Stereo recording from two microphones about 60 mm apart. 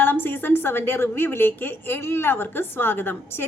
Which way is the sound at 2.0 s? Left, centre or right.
Left.